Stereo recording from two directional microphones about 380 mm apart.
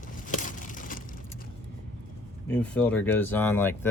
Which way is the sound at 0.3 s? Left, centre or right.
Centre.